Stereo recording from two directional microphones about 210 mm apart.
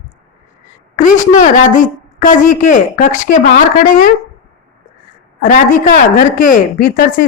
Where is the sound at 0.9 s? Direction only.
35° left (ahead or behind).